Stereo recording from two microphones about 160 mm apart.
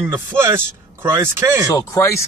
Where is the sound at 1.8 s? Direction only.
20° left (ahead or behind).